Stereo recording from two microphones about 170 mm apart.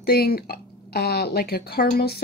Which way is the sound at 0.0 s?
70° left (ahead or behind).